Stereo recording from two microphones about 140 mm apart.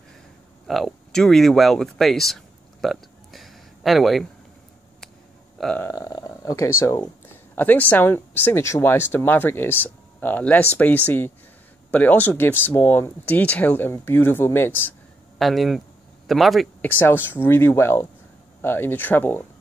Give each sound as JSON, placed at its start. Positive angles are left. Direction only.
{"t": 0.7, "sound": "speech", "side_deg": 0}
{"t": 5.6, "sound": "burping", "side_deg": 5}
{"t": 5.9, "sound": "speech", "side_deg": 25}
{"t": 15.3, "sound": "speech", "side_deg": 0}
{"t": 16.8, "sound": "speech", "side_deg": 15}